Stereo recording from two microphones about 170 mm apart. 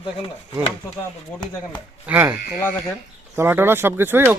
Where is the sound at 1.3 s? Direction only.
10° left (ahead or behind).